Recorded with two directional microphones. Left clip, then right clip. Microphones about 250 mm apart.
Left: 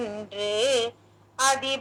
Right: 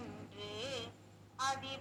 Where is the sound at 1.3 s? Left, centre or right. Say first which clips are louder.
Left 15 dB; left.